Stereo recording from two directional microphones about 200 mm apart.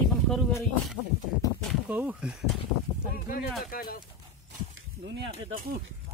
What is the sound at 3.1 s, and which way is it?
Speech, 45° left (ahead or behind).